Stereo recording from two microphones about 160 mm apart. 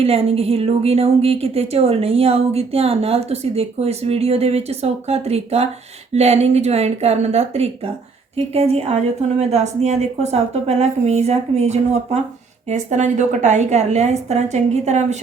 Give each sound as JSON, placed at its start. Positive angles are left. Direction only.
{"t": 0.0, "sound": "a woman's voice", "side_deg": -40}